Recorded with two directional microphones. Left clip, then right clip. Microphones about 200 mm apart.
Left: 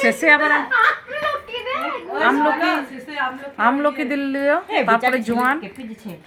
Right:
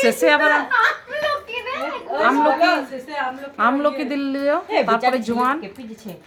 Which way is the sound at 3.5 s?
10° right (ahead or behind).